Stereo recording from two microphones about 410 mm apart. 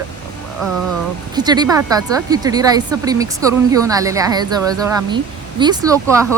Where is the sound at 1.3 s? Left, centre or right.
Centre.